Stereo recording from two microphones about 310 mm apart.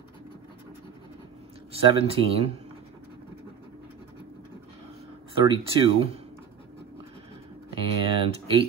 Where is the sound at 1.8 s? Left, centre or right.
Centre.